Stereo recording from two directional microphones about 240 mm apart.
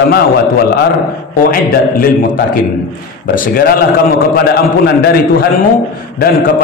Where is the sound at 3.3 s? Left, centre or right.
Left.